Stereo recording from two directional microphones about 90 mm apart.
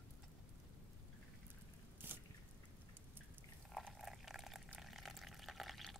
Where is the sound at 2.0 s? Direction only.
25° right (ahead or behind).